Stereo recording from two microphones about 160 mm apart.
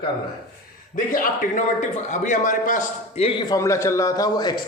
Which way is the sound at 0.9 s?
60° left (ahead or behind).